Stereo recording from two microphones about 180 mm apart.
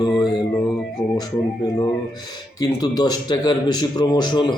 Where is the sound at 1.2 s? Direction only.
20° left (ahead or behind).